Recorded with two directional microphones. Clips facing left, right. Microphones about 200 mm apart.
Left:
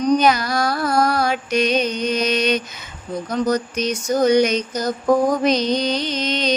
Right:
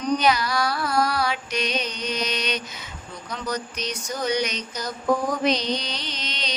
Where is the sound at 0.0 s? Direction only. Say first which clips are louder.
Left 5 dB; 45° left (ahead or behind).